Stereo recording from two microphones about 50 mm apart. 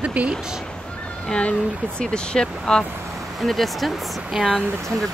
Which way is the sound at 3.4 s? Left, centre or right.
Centre.